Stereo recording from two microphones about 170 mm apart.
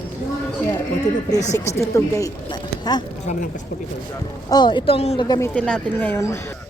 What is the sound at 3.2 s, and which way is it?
Speech, 50° left (ahead or behind).